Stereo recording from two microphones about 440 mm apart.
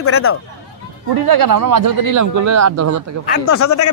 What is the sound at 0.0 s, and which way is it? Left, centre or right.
Speech, left.